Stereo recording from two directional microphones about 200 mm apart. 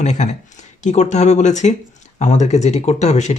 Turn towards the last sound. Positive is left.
turn(degrees=35)  # may be behind; listen again after turning